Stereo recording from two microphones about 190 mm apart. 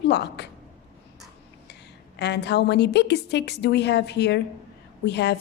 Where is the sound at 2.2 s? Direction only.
60° left (ahead or behind).